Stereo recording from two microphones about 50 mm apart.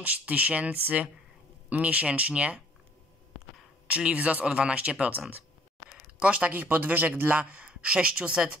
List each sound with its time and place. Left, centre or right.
0.0 s speech: right
3.8 s speech: right
6.1 s speech: right
6.5 s speech: right
7.5 s speech: right